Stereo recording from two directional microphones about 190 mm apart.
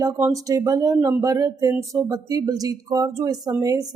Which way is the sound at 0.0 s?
15° right (ahead or behind).